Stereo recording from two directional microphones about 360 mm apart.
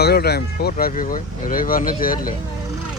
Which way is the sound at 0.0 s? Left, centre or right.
Left.